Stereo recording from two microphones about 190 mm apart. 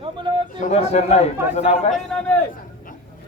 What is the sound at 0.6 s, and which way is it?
A man's voice, 35° left (ahead or behind).